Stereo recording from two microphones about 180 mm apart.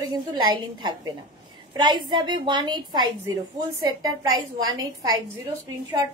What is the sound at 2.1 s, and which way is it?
A woman's voice, 25° right (ahead or behind).